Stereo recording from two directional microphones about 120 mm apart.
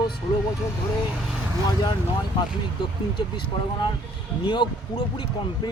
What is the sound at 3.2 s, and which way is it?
Speech, 40° left (ahead or behind).